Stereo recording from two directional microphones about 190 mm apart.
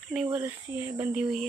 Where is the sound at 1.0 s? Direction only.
5° right (ahead or behind).